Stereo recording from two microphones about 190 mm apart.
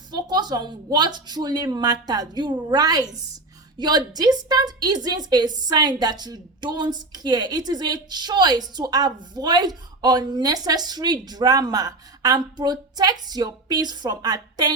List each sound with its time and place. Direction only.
0.1 s a woman's voice: 20° right (ahead or behind)